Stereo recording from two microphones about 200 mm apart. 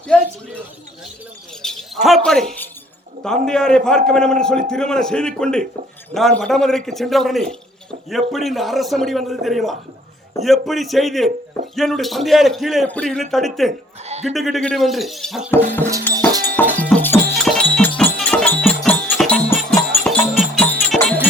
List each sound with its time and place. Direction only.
0.1 s a man's voice: 5° left (ahead or behind)
1.6 s a man's voice: centre (ahead or behind)
14.1 s speech: 35° right (ahead or behind)
14.3 s a man's voice: centre (ahead or behind)
16.6 s music: 10° left (ahead or behind)